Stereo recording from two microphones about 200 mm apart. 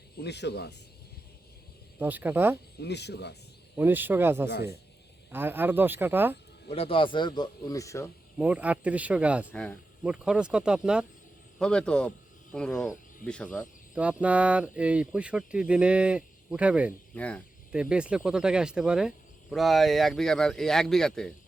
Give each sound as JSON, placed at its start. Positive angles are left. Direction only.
{"t": 0.2, "sound": "speech", "side_deg": 55}
{"t": 2.0, "sound": "speech", "side_deg": -10}
{"t": 2.7, "sound": "speech", "side_deg": 55}
{"t": 3.8, "sound": "speech", "side_deg": -10}
{"t": 4.4, "sound": "speech", "side_deg": 55}
{"t": 5.3, "sound": "speech", "side_deg": -10}
{"t": 6.7, "sound": "a man's voice", "side_deg": 30}
{"t": 8.4, "sound": "speech", "side_deg": -5}
{"t": 9.5, "sound": "speech", "side_deg": 5}
{"t": 13.9, "sound": "speech", "side_deg": -5}
{"t": 17.2, "sound": "speech", "side_deg": 5}
{"t": 17.7, "sound": "speech", "side_deg": -5}